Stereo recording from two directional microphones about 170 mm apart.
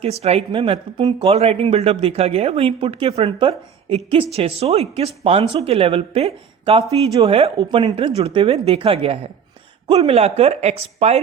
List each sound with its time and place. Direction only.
0.0 s a woman's voice: 35° right (ahead or behind)